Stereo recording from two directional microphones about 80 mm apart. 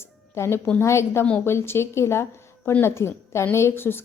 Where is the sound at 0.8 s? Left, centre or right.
Left.